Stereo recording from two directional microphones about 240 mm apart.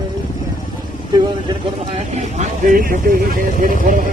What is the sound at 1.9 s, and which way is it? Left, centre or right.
Speech, right.